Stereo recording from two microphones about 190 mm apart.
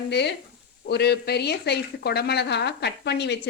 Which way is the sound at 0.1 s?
60° left (ahead or behind).